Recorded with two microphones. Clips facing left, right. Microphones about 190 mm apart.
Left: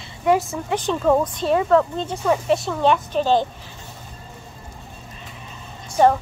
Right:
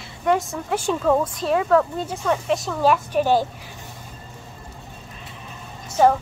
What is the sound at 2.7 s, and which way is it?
Speech, 5° right (ahead or behind).